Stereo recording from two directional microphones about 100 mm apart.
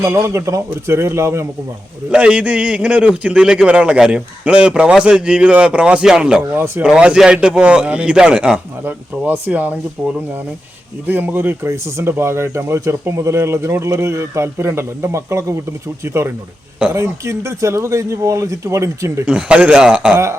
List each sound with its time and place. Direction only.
0.0 s speech: 30° right (ahead or behind)
2.0 s a man's voice: 10° right (ahead or behind)
6.5 s speech: 20° right (ahead or behind)
6.8 s a man's voice: 10° right (ahead or behind); by 19.2 s 30° right (ahead or behind)
19.2 s a man's voice: 10° right (ahead or behind)